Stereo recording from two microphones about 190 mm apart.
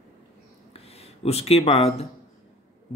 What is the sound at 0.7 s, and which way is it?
Speech, 30° left (ahead or behind).